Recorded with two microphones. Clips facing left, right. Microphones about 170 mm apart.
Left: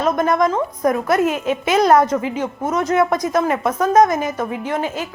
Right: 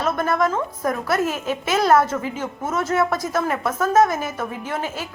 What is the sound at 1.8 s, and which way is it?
A woman's voice, 15° left (ahead or behind).